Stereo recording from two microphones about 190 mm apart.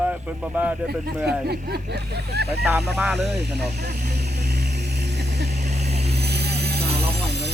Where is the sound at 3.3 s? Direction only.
60° right (ahead or behind).